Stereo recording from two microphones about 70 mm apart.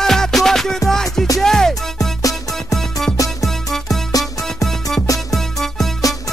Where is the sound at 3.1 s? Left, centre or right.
Left.